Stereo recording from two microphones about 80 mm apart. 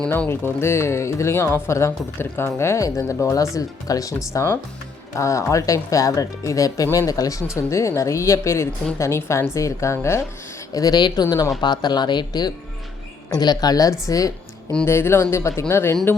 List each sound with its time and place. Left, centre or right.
0.3 s speech: left
10.8 s speech: left
14.8 s speech: left